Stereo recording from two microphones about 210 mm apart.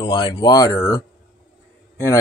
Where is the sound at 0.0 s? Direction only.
20° left (ahead or behind).